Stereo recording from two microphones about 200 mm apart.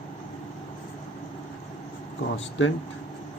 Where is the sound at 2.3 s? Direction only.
70° left (ahead or behind).